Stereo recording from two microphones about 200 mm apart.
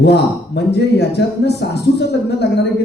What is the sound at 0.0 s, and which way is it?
Speech, 55° left (ahead or behind).